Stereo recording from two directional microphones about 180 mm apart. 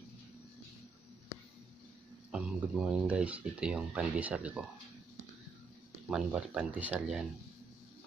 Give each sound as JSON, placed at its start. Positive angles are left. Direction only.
{"t": 2.3, "sound": "speech", "side_deg": -5}
{"t": 6.0, "sound": "speech", "side_deg": -5}